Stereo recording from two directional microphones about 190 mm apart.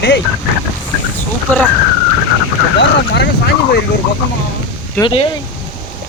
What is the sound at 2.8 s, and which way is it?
Speech, 65° left (ahead or behind).